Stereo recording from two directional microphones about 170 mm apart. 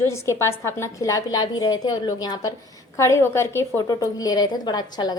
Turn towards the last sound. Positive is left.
turn(degrees=25)  # may be behind; listen again after turning